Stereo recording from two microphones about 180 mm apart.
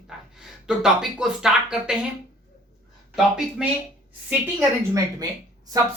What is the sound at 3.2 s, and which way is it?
Speech, centre (ahead or behind).